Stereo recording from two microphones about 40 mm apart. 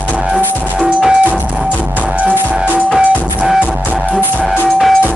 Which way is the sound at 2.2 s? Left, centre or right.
Right.